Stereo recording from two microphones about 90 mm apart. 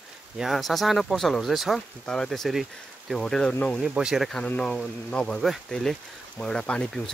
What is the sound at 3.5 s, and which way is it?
Speech, 20° left (ahead or behind).